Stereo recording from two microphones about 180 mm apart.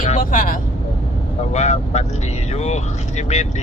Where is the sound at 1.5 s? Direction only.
40° left (ahead or behind).